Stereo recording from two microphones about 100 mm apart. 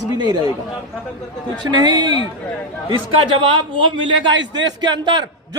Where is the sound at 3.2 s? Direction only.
60° right (ahead or behind).